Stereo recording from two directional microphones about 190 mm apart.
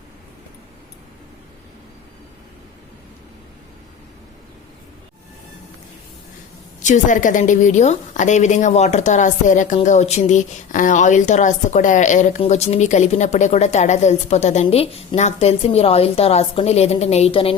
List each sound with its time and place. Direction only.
6.8 s a woman's voice: 40° left (ahead or behind)